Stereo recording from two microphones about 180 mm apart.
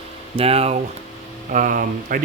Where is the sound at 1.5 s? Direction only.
50° right (ahead or behind).